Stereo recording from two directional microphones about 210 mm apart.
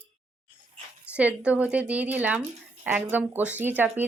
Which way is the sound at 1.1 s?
5° right (ahead or behind).